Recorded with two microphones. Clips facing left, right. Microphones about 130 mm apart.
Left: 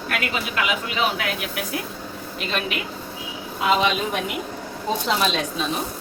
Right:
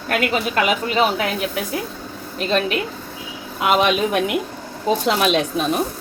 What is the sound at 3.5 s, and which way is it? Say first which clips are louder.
A woman's voice: right 3 dB; 65° right (ahead or behind).